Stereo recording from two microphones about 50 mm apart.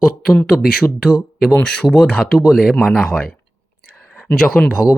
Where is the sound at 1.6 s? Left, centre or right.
Centre.